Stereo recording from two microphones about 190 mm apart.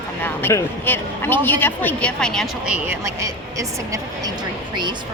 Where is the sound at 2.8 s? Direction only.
15° right (ahead or behind).